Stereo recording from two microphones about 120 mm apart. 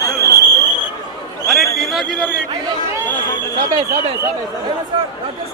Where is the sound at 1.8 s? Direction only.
Centre (ahead or behind).